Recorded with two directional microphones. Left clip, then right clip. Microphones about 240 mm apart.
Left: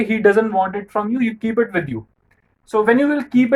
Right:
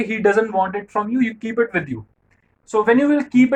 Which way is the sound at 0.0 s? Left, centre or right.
Left.